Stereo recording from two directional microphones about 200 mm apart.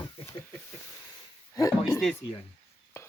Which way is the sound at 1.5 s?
15° left (ahead or behind).